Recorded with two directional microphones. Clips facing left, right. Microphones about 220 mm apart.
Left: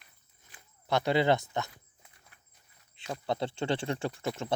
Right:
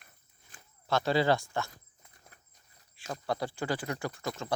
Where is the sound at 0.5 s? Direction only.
45° right (ahead or behind).